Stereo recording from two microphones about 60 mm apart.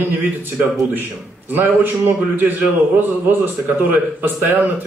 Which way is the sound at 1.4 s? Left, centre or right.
Right.